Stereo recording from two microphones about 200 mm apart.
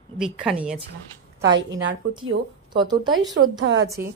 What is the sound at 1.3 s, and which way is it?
A woman's voice, 15° right (ahead or behind).